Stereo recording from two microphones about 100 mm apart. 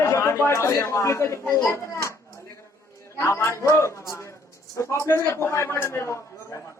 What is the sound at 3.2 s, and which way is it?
A man's voice, 25° left (ahead or behind).